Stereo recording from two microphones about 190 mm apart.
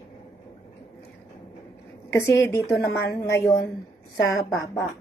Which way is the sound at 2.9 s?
65° left (ahead or behind).